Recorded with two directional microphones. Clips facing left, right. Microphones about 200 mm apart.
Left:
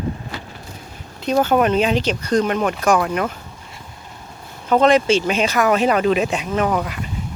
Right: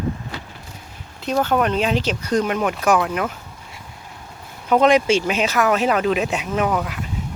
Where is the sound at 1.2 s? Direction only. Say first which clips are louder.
Left 3 dB; 5° left (ahead or behind).